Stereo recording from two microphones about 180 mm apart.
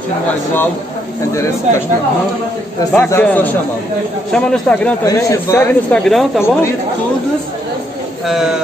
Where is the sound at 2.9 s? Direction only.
15° left (ahead or behind).